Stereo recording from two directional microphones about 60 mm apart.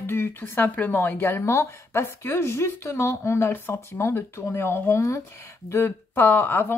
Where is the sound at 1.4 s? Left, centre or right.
Left.